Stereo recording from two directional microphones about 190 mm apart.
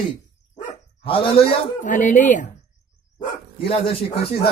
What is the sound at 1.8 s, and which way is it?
Speech, 40° left (ahead or behind).